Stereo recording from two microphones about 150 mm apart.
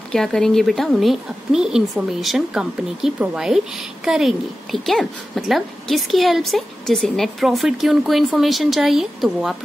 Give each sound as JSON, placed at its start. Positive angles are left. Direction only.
{"t": 0.1, "sound": "a woman's voice", "side_deg": 5}